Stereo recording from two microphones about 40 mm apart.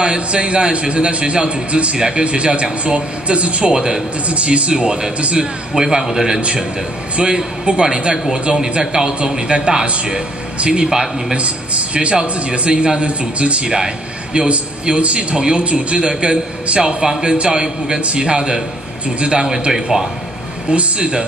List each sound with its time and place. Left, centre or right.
0.0 s a man's voice: right
7.2 s a man's voice: right
11.3 s a man's voice: right; by 20.1 s centre
20.7 s a man's voice: right